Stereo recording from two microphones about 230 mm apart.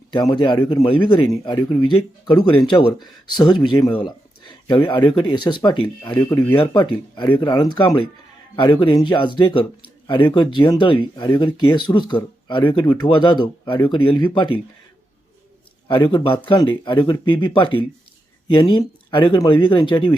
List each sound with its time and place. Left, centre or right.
0.1 s speech: centre
15.9 s speech: left